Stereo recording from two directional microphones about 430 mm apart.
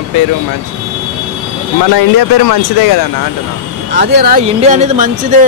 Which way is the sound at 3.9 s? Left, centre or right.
Right.